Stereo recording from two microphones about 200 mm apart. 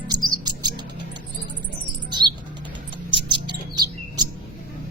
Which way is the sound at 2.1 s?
20° right (ahead or behind).